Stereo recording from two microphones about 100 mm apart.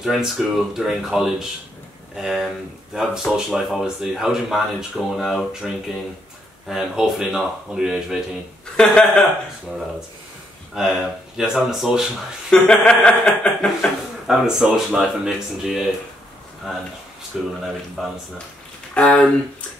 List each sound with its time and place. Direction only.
0.0 s speech: 5° right (ahead or behind)
6.7 s speech: 5° right (ahead or behind)
10.7 s speech: 5° right (ahead or behind)
12.4 s speech: 10° left (ahead or behind)
14.2 s speech: 5° right (ahead or behind)
17.3 s speech: centre (ahead or behind)
18.9 s speech: 15° left (ahead or behind)